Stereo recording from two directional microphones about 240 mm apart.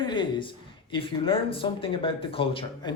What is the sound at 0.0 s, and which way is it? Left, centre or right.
Speech, centre.